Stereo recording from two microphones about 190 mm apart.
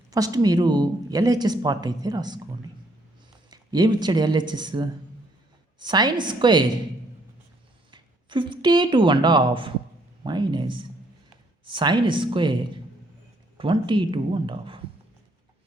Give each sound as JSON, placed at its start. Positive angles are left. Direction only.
{"t": 0.1, "sound": "speech", "side_deg": -20}
{"t": 3.5, "sound": "speech", "side_deg": -20}
{"t": 7.9, "sound": "speech", "side_deg": -25}